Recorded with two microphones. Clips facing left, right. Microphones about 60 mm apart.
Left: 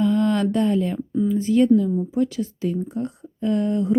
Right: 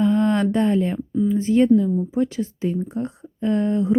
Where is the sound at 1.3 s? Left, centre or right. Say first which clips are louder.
Right 1 dB; right.